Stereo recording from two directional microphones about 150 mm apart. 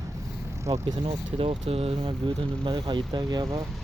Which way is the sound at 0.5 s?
20° right (ahead or behind).